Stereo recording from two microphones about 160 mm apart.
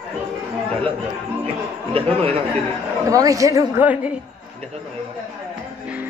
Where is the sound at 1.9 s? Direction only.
35° right (ahead or behind).